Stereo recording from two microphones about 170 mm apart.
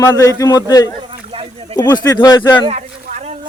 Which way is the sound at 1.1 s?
35° right (ahead or behind).